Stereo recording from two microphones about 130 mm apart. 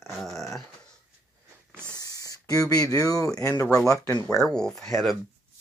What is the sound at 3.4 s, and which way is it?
Speech, 20° left (ahead or behind).